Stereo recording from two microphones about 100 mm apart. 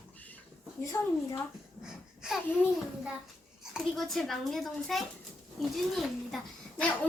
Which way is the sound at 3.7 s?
Centre (ahead or behind).